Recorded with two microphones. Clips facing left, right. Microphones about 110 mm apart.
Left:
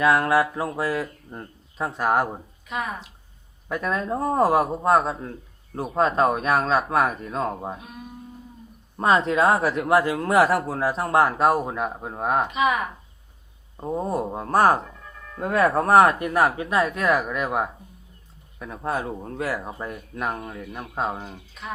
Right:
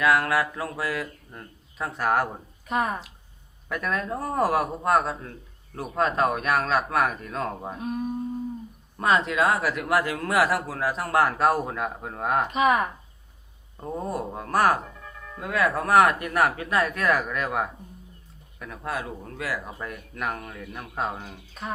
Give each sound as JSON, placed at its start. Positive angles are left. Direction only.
{"t": 0.0, "sound": "speech", "side_deg": 25}
{"t": 2.6, "sound": "speech", "side_deg": -45}
{"t": 3.7, "sound": "speech", "side_deg": 25}
{"t": 7.4, "sound": "speech", "side_deg": 15}
{"t": 7.8, "sound": "speech", "side_deg": -40}
{"t": 9.0, "sound": "speech", "side_deg": 30}
{"t": 12.5, "sound": "speech", "side_deg": -40}
{"t": 13.7, "sound": "speech", "side_deg": 20}
{"t": 15.4, "sound": "speech", "side_deg": 40}
{"t": 20.6, "sound": "speech", "side_deg": 5}
{"t": 20.9, "sound": "speech", "side_deg": 25}
{"t": 21.6, "sound": "speech", "side_deg": -40}